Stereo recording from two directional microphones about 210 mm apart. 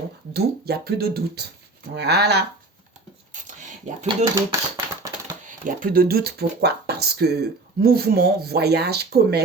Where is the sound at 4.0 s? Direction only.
25° right (ahead or behind).